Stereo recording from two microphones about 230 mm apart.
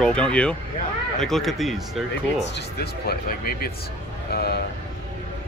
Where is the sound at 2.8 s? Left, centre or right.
Left.